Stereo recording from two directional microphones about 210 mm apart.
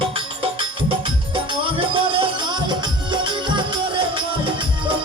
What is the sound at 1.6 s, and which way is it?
Music, 25° right (ahead or behind).